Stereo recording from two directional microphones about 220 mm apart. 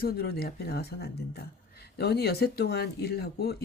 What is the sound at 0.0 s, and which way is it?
Speech, 45° left (ahead or behind).